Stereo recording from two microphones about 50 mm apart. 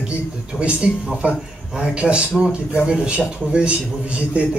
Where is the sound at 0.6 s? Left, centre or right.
Right.